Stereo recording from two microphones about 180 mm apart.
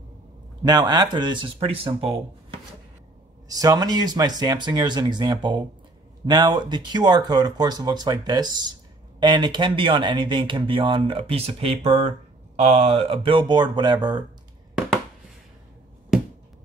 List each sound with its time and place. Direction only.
0.7 s speech: 20° right (ahead or behind)
3.4 s speech: 20° right (ahead or behind)